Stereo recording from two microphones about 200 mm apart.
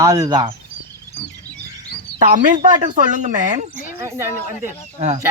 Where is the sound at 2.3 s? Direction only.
40° right (ahead or behind).